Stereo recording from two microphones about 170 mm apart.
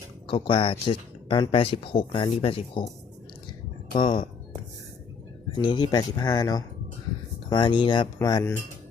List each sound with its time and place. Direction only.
0.3 s speech: 30° left (ahead or behind)
3.9 s speech: 30° left (ahead or behind)
5.5 s speech: 25° left (ahead or behind)